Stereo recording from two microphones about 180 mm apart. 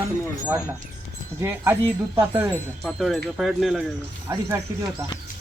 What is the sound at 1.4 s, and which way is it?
Speech, 15° right (ahead or behind).